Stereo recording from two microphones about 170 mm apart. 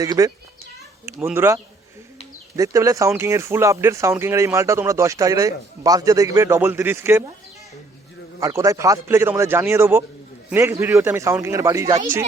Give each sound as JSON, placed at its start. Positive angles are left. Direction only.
{"t": 0.0, "sound": "speech", "side_deg": -20}
{"t": 8.4, "sound": "speech", "side_deg": -20}